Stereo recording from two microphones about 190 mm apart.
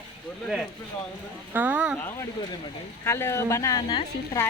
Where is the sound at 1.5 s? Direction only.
10° right (ahead or behind).